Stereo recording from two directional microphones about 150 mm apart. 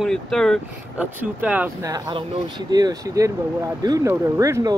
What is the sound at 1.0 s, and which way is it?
Speech, 10° right (ahead or behind).